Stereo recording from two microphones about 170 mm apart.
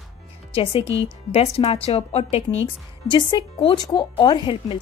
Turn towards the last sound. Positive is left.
turn(degrees=30)  # may be behind; listen again after turning